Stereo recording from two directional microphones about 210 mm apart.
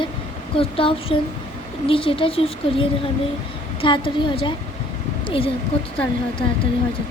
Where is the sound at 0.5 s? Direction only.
25° left (ahead or behind).